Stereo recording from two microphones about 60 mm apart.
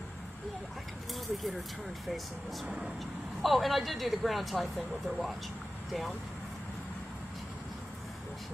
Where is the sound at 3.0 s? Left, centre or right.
Centre.